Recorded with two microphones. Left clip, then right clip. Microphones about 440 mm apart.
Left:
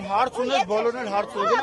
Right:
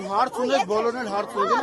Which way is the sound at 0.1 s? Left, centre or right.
Left.